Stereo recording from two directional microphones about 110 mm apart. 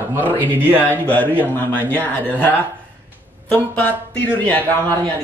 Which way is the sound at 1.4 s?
15° left (ahead or behind).